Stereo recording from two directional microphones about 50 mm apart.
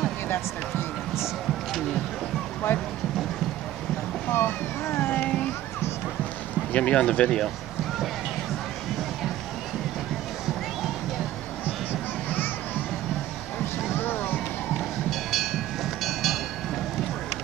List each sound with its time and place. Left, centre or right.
4.3 s boat: left
5.0 s a sound: left
6.7 s speech: left
11.6 s music: left
13.9 s music: left
15.0 s train: centre